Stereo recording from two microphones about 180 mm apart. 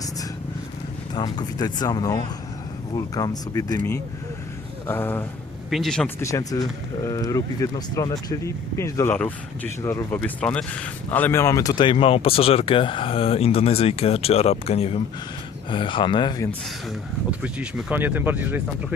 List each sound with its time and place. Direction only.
1.1 s speech: 20° left (ahead or behind)
4.9 s speech: 10° left (ahead or behind)
5.7 s speech: centre (ahead or behind)
6.1 s speech: 15° left (ahead or behind)
16.5 s speech: centre (ahead or behind)